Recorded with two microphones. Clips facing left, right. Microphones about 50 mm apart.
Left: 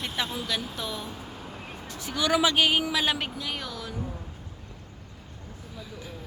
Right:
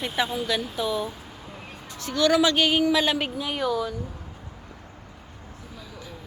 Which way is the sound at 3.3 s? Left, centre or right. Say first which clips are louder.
Right 9 dB; centre.